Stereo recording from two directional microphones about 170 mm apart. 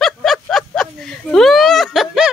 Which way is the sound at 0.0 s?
Centre (ahead or behind).